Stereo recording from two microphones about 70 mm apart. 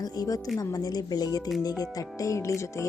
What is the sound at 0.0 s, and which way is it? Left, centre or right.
A woman's voice, left.